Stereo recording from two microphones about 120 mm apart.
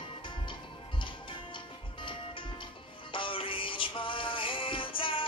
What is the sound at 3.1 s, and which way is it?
Music, 45° left (ahead or behind).